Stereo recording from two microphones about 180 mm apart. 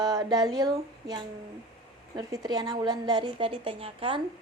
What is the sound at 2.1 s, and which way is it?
A woman's voice, 20° right (ahead or behind).